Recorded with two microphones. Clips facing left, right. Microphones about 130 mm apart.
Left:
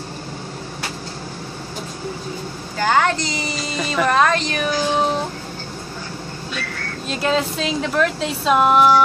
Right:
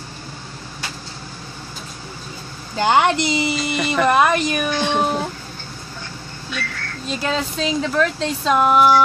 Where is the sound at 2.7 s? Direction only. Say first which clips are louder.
Right 2 dB; 20° right (ahead or behind).